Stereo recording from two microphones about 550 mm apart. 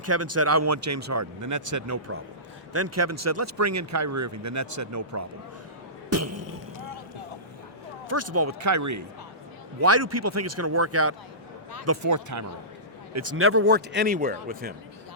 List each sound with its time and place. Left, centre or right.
0.0 s speech: right
6.1 s a sound: right
8.0 s a man's voice: right